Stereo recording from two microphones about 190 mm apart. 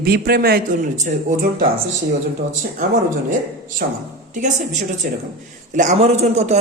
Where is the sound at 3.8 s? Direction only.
50° right (ahead or behind).